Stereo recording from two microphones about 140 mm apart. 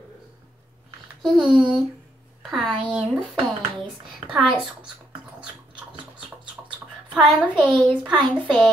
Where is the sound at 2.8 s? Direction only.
5° right (ahead or behind).